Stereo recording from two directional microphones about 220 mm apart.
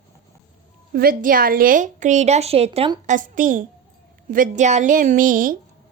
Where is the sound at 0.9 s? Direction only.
40° right (ahead or behind).